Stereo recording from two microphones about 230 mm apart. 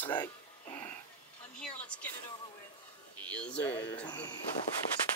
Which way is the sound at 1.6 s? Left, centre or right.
Centre.